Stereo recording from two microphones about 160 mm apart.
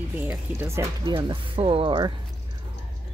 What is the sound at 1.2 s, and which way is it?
Speech, 30° right (ahead or behind).